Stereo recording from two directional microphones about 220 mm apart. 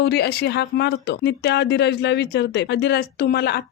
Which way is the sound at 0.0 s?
45° left (ahead or behind).